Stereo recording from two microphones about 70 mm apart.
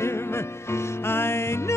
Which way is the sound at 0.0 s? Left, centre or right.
Left.